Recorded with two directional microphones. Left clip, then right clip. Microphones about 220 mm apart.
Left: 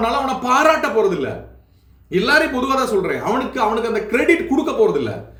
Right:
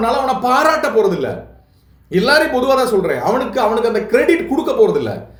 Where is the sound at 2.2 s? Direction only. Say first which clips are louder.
Right 3 dB; 25° left (ahead or behind).